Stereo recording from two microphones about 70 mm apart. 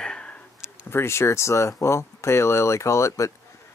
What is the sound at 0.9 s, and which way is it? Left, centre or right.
Speech, left.